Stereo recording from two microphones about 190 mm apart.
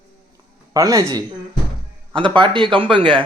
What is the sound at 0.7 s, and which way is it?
A man's voice, 15° right (ahead or behind).